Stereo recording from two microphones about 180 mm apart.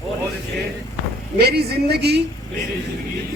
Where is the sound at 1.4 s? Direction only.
65° right (ahead or behind).